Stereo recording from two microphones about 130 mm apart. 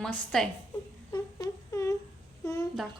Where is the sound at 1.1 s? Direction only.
25° left (ahead or behind).